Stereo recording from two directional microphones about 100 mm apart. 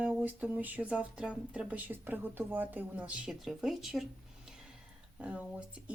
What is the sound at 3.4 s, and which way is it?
Speech, 5° right (ahead or behind).